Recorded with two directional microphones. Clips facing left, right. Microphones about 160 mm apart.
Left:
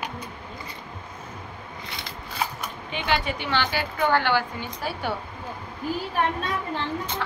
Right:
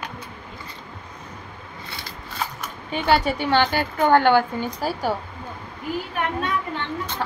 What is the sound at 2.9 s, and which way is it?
A woman's voice, 40° right (ahead or behind).